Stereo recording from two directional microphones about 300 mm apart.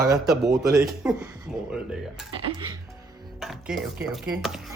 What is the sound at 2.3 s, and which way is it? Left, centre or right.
Speech, centre.